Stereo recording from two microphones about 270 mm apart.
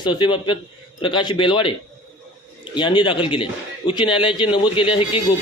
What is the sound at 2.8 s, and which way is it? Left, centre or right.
A man's voice, centre.